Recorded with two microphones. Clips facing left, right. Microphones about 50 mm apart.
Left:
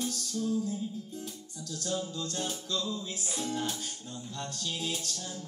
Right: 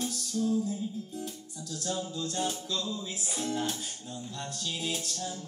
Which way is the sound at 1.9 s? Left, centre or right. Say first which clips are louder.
Right 2 dB; centre.